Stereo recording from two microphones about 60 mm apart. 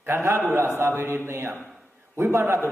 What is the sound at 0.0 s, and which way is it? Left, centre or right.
A man's voice, right.